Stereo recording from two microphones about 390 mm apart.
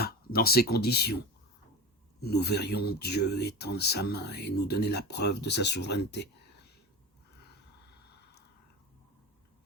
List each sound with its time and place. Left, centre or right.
0.0 s speech: left
2.2 s speech: left